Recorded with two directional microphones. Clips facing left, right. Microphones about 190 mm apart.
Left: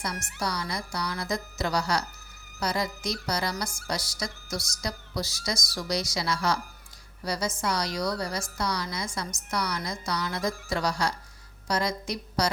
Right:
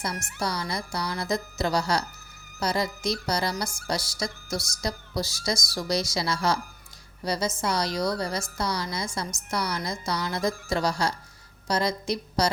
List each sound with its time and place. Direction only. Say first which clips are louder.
0.2 s speech: right 2 dB; 50° right (ahead or behind)
0.4 s speech: right 2 dB; 30° right (ahead or behind)